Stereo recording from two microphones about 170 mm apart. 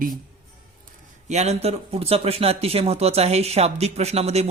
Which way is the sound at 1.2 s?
40° right (ahead or behind).